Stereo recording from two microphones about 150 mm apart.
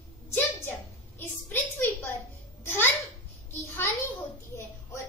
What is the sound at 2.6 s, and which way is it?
Babbling, 15° left (ahead or behind).